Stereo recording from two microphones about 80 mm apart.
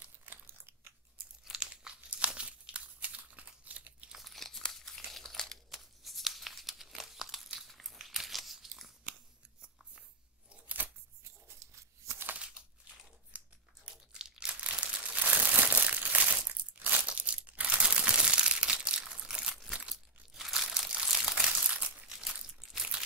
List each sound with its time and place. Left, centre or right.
0.0 s crunch: right
1.4 s crunch: centre
2.0 s crumpling: centre
4.1 s tearing: centre
9.6 s a sound: centre
10.5 s scissors: right
12.1 s a sound: right
12.4 s crumpling: centre
22.0 s crumpling: centre